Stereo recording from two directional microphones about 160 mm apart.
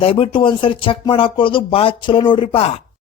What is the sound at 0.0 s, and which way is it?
Speech, 35° left (ahead or behind).